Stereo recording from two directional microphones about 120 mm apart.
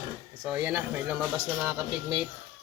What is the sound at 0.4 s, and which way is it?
Speech, 10° right (ahead or behind).